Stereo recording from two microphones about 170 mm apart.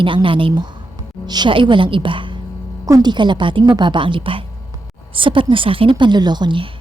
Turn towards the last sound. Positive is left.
turn(degrees=-30)  # may be behind; listen again after turning